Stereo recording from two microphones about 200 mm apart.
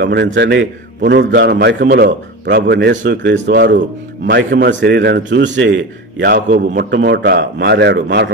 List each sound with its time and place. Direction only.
0.0 s a man's voice: 60° right (ahead or behind)
6.3 s a man's voice: 40° right (ahead or behind)
6.8 s a man's voice: 55° right (ahead or behind)